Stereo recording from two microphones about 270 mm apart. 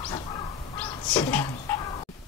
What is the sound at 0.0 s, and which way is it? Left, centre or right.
Crow, centre.